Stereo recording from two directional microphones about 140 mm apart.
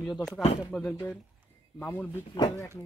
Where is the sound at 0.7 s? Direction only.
15° left (ahead or behind).